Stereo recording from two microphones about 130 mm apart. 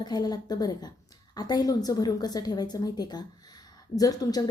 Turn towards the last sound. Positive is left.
turn(degrees=30)  # may be behind; listen again after turning